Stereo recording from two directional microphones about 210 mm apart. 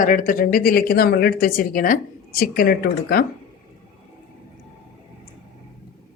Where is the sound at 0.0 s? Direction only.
40° left (ahead or behind).